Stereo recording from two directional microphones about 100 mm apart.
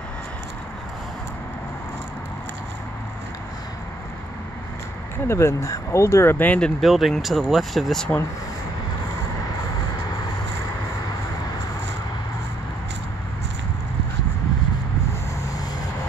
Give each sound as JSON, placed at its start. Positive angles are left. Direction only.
{"t": 5.2, "sound": "speech", "side_deg": 25}
{"t": 6.8, "sound": "speech", "side_deg": 0}